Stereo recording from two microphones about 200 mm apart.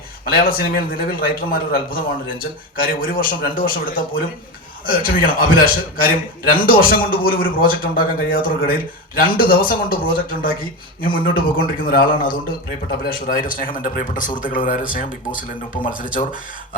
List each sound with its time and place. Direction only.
0.3 s a man's voice: 45° left (ahead or behind)
13.1 s a man's voice: 45° left (ahead or behind)